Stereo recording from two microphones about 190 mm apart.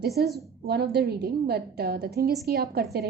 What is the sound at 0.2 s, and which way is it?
A woman's voice, 60° right (ahead or behind).